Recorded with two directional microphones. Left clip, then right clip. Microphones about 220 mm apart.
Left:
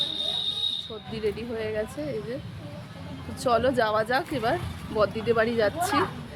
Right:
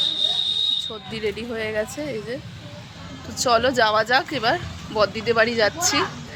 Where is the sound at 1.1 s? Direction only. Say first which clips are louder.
Right 2 dB; 25° right (ahead or behind).